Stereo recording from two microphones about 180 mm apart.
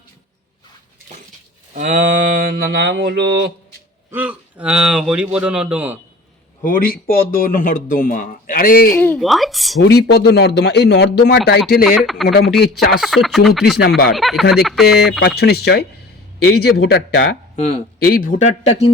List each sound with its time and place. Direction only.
1.7 s a sound: 45° right (ahead or behind); by 3.5 s 75° right (ahead or behind)
4.1 s speech: 10° right (ahead or behind)
6.6 s speech: 50° left (ahead or behind)
9.0 s speech: 5° left (ahead or behind)
9.8 s speech: 65° left (ahead or behind)
11.8 s speech: centre (ahead or behind)
15.4 s speech: 65° left (ahead or behind)
18.0 s speech: 55° left (ahead or behind)